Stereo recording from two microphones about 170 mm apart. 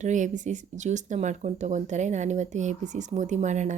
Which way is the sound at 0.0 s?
45° right (ahead or behind).